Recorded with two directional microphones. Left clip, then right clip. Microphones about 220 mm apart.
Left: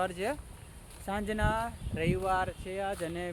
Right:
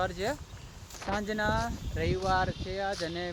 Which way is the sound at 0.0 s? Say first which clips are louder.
Right 1 dB; 5° left (ahead or behind).